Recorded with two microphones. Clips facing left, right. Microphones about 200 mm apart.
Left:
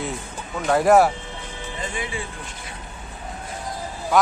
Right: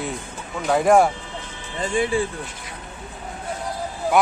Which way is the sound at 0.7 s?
Centre (ahead or behind).